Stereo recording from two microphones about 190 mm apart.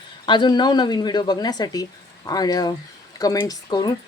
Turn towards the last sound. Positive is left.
turn(degrees=20)  # may be behind; listen again after turning